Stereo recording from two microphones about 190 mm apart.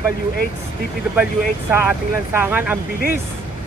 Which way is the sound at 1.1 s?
10° right (ahead or behind).